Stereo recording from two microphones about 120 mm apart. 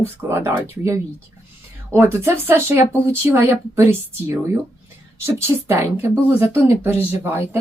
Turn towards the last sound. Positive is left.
turn(degrees=-20)  # may be behind; listen again after turning